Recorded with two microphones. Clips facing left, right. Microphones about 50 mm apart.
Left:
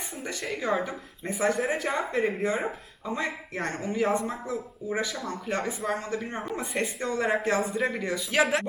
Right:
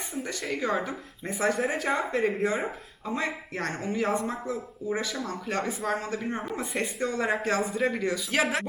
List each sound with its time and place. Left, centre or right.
0.2 s speech: centre
3.7 s speech: centre